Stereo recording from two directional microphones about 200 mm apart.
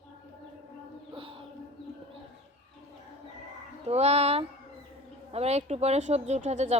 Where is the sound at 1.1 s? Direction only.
25° right (ahead or behind).